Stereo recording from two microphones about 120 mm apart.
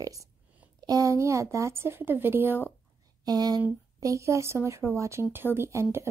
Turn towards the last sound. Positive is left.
turn(degrees=-20)  # may be behind; listen again after turning